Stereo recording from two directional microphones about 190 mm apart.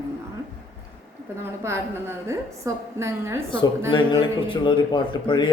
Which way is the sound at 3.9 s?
25° left (ahead or behind).